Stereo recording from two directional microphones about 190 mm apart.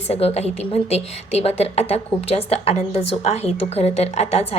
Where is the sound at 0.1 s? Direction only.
35° left (ahead or behind).